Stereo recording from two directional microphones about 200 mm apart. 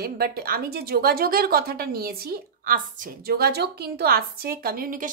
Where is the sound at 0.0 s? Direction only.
50° right (ahead or behind).